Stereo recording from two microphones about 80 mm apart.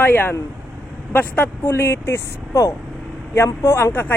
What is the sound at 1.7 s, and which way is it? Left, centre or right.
A man's voice, left.